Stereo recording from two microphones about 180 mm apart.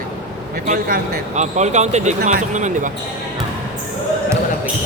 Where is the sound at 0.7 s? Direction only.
50° right (ahead or behind).